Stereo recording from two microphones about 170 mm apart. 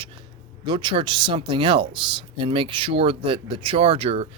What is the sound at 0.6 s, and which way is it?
Speech, 25° right (ahead or behind).